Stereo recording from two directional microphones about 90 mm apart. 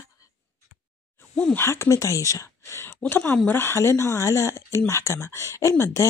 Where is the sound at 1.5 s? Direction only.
30° left (ahead or behind).